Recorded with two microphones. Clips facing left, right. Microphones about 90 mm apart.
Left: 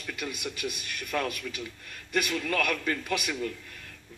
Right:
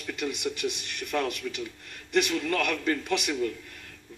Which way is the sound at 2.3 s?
25° right (ahead or behind).